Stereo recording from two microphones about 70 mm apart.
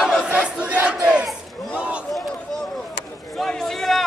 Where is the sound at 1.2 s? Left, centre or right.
Centre.